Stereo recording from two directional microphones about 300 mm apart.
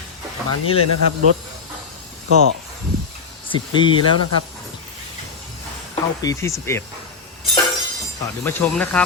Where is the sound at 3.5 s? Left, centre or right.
Centre.